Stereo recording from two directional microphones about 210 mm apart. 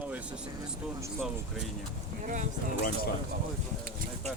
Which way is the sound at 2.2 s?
35° right (ahead or behind).